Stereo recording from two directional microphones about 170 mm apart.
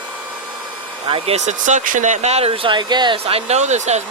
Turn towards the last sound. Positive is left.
turn(degrees=-40)  # may be behind; listen again after turning